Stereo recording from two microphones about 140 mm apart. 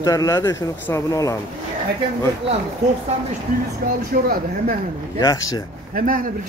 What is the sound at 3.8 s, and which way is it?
Speech, 90° right.